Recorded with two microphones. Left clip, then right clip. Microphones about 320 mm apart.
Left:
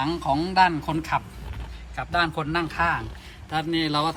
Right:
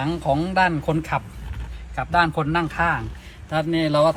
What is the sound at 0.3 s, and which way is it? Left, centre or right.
A man's voice, centre.